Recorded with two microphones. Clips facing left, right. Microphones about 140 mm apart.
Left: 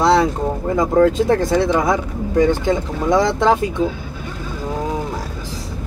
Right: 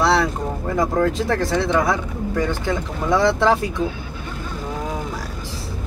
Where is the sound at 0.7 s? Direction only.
20° left (ahead or behind).